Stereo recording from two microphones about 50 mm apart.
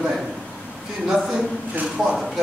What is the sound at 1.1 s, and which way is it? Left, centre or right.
Speech, centre.